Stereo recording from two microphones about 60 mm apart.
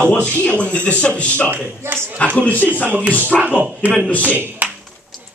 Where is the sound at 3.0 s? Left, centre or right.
Right.